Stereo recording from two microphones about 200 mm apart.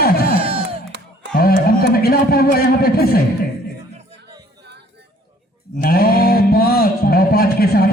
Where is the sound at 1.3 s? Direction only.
50° left (ahead or behind).